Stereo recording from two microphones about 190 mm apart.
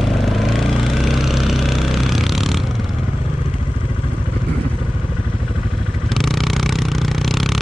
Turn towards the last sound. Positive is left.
turn(degrees=0)  # may be behind; listen again after turning